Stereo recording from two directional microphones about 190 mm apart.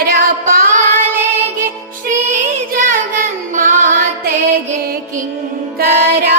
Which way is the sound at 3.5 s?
40° right (ahead or behind).